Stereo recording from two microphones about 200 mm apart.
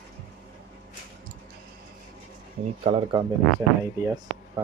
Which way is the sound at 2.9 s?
25° right (ahead or behind).